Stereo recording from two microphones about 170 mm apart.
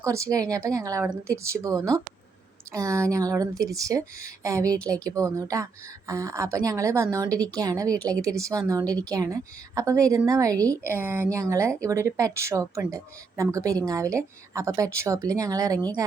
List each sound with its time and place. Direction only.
0.0 s a woman's voice: 20° right (ahead or behind)